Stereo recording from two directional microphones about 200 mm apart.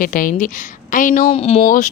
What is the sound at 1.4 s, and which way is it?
Speech, 30° left (ahead or behind).